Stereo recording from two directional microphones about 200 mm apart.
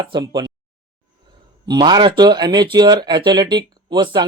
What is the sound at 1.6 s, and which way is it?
Speech, 20° right (ahead or behind).